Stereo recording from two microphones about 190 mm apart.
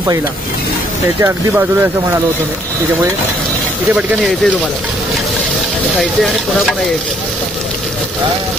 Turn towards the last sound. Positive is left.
turn(degrees=0)  # may be behind; listen again after turning